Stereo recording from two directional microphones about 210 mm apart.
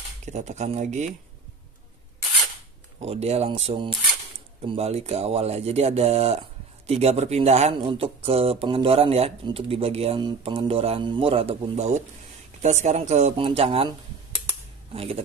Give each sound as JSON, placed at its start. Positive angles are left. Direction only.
{"t": 0.2, "sound": "speech", "side_deg": -35}
{"t": 3.0, "sound": "speech", "side_deg": -30}
{"t": 15.0, "sound": "speech", "side_deg": -30}